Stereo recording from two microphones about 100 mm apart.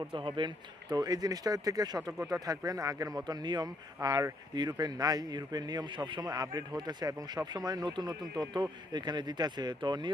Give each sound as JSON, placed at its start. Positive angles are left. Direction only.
{"t": 0.1, "sound": "speech", "side_deg": -55}
{"t": 4.5, "sound": "speech", "side_deg": -45}